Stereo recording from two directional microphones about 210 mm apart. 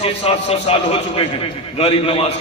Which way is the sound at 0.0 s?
30° left (ahead or behind).